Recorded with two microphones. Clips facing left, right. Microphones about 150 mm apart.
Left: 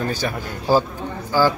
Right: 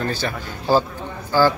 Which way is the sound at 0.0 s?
10° left (ahead or behind).